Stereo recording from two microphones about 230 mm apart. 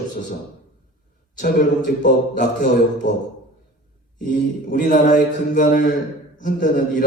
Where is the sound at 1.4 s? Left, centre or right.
Left.